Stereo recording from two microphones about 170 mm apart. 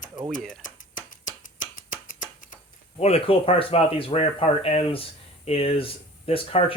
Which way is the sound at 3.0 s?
35° left (ahead or behind).